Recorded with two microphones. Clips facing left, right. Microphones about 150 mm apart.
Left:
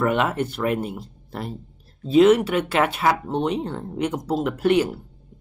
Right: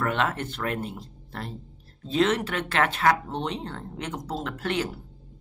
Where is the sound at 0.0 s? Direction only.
10° left (ahead or behind).